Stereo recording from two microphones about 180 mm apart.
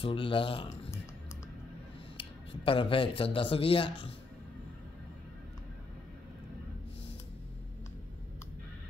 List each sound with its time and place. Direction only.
0.0 s speech: 30° left (ahead or behind)
2.1 s speech: 30° left (ahead or behind)